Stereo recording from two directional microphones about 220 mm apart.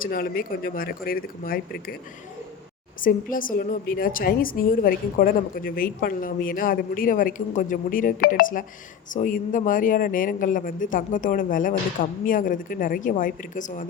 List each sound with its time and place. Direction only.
0.0 s a woman's voice: 40° left (ahead or behind)
3.0 s a woman's voice: 40° left (ahead or behind)